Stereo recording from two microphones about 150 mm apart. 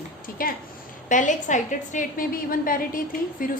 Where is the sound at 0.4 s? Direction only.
70° left (ahead or behind).